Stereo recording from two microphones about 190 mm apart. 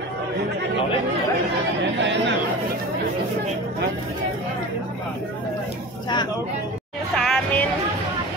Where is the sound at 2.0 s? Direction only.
70° right (ahead or behind).